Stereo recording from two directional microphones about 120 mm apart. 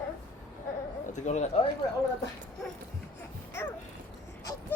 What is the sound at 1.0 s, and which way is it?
Speech, 85° left.